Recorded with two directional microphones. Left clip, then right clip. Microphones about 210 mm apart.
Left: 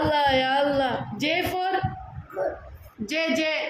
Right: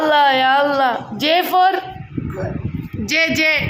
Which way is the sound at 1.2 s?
Centre (ahead or behind).